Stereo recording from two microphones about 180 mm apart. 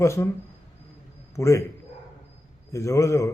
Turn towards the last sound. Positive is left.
turn(degrees=15)  # may be behind; listen again after turning